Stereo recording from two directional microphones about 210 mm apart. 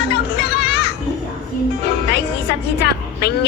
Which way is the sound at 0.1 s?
50° left (ahead or behind).